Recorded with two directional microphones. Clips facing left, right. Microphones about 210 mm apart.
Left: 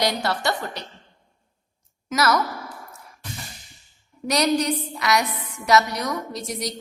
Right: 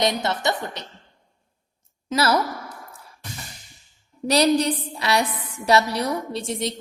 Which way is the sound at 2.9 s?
30° right (ahead or behind).